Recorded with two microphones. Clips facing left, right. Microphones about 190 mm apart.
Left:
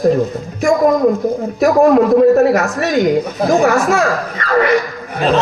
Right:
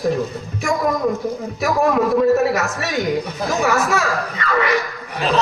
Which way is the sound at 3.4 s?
50° left (ahead or behind).